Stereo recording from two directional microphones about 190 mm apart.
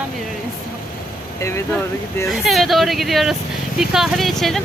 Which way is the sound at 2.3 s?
Centre (ahead or behind).